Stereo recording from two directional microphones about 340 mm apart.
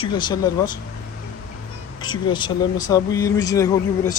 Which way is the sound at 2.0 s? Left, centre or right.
Centre.